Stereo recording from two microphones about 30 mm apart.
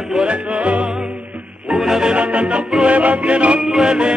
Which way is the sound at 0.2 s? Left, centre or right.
Right.